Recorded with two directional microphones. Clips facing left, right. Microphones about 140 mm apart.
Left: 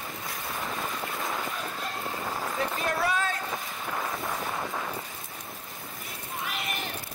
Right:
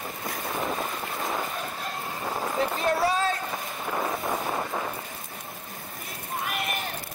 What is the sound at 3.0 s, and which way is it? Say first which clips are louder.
Boat: right 2 dB; 30° right (ahead or behind).